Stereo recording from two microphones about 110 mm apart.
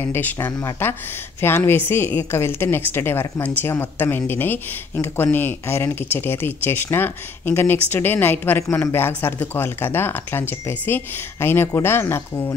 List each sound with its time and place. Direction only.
0.0 s speech: 20° left (ahead or behind)